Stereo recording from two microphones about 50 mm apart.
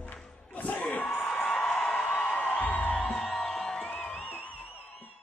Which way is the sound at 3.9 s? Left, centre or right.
Left.